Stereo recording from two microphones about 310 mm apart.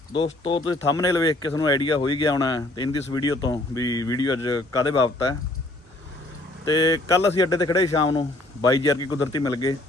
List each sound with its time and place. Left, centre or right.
0.1 s speech: centre
6.7 s speech: centre